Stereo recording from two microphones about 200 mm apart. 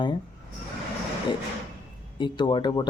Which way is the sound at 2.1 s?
25° left (ahead or behind).